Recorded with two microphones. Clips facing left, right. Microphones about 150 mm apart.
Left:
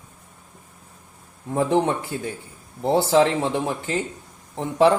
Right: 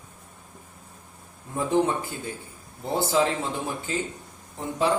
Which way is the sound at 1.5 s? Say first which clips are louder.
Left 3 dB; 80° left.